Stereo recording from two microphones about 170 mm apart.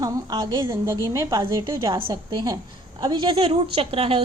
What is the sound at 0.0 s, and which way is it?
A woman's voice, 25° right (ahead or behind).